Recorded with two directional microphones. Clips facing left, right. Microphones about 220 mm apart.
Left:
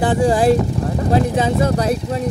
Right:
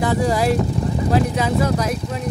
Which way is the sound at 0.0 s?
30° left (ahead or behind).